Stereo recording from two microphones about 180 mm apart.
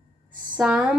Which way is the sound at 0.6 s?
5° right (ahead or behind).